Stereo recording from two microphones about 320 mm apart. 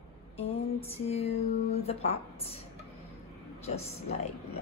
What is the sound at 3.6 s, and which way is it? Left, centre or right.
Speech, centre.